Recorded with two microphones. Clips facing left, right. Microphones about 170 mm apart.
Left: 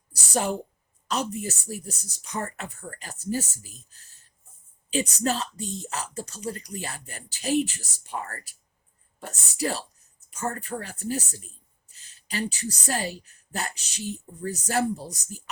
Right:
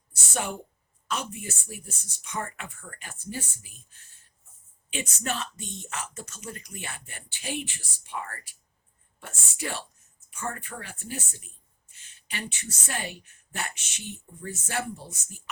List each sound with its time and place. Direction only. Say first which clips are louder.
0.1 s speech: left 6 dB; 35° left (ahead or behind)